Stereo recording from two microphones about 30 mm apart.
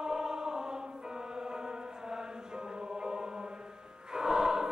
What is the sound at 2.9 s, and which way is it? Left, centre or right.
Music, right.